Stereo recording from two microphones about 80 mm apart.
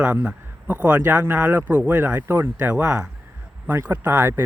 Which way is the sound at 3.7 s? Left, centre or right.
Right.